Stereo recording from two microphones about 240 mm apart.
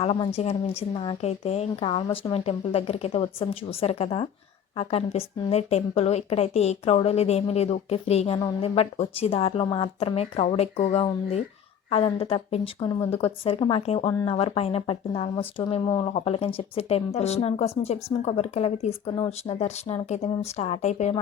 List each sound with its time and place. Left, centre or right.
0.0 s a woman's voice: left